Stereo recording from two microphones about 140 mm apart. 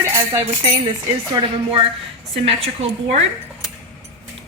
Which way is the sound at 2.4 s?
50° right (ahead or behind).